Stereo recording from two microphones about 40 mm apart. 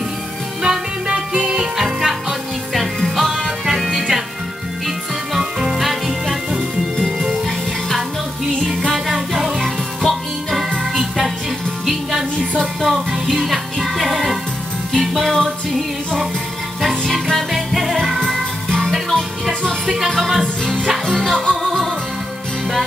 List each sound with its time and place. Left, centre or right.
0.6 s music: centre
1.8 s music: centre
3.6 s music: centre
9.0 s music: centre
17.3 s music: centre
18.7 s music: centre
20.1 s music: centre
20.8 s music: centre